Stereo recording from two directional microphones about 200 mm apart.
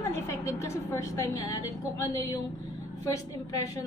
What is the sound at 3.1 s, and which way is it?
Speech, 15° left (ahead or behind).